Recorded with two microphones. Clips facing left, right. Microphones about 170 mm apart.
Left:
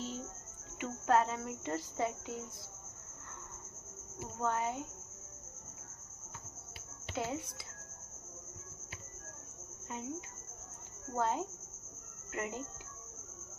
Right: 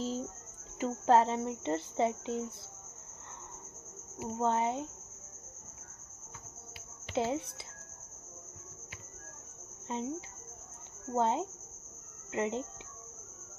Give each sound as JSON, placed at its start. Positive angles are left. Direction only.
{"t": 0.0, "sound": "cricket", "side_deg": -35}
{"t": 0.8, "sound": "speech", "side_deg": -30}
{"t": 4.2, "sound": "speech", "side_deg": -25}
{"t": 7.1, "sound": "speech", "side_deg": -25}
{"t": 9.9, "sound": "speech", "side_deg": -25}